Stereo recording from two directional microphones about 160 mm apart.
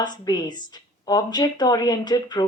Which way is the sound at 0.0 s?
25° left (ahead or behind).